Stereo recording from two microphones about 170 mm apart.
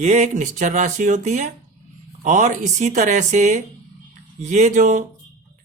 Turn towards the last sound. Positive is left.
turn(degrees=-45)  # may be behind; listen again after turning